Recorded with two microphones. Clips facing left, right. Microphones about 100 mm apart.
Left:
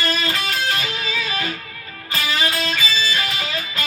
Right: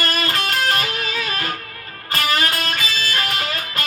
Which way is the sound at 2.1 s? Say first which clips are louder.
Right 2 dB; 55° right (ahead or behind).